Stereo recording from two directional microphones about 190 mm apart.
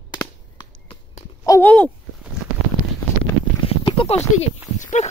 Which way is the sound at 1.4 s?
10° left (ahead or behind).